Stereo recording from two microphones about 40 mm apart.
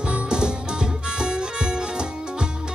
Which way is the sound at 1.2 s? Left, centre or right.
Centre.